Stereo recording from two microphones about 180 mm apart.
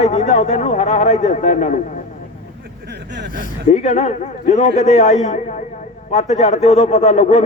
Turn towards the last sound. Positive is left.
turn(degrees=40)  # may be behind; listen again after turning